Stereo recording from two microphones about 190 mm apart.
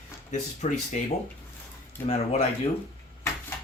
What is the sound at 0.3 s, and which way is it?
Speech, 40° left (ahead or behind).